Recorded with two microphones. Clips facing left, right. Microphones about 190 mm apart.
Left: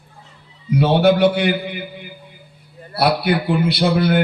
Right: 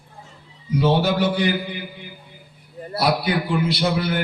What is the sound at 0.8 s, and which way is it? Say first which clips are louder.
Speech: left 5 dB; 65° left (ahead or behind).